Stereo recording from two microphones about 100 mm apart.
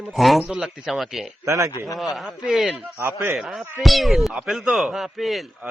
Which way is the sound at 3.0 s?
25° right (ahead or behind).